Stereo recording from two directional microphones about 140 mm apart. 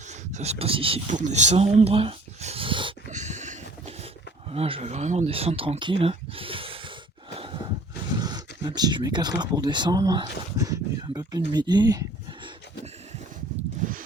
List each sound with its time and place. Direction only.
0.1 s speech: 55° right (ahead or behind)
1.0 s speech: 60° right (ahead or behind); by 2.9 s 35° right (ahead or behind)
3.1 s a sound: 60° right (ahead or behind)
4.5 s speech: 45° right (ahead or behind)
7.3 s a sound: 35° right (ahead or behind)
8.1 s speech: 30° right (ahead or behind)